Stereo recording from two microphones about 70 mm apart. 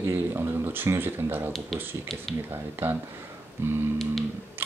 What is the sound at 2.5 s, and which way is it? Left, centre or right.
Speech, right.